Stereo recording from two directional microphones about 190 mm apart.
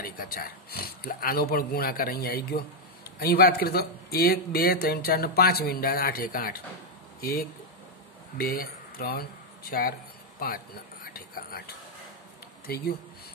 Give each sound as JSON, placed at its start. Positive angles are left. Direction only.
{"t": 0.0, "sound": "speech", "side_deg": 50}